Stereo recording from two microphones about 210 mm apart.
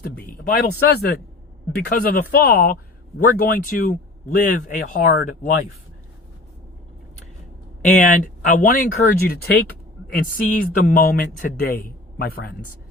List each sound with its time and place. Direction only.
0.0 s speech: 45° left (ahead or behind)
7.9 s speech: 40° left (ahead or behind)